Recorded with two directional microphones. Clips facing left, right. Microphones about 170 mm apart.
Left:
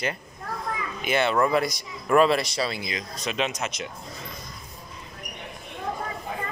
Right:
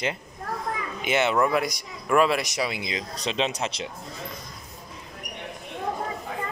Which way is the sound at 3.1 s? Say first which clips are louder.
Right 1 dB; 30° right (ahead or behind).